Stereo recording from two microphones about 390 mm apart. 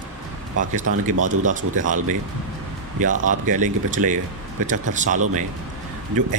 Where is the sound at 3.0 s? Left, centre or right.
Centre.